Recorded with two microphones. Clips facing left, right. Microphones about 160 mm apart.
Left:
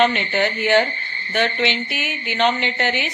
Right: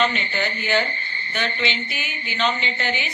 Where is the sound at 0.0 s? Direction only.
60° left (ahead or behind).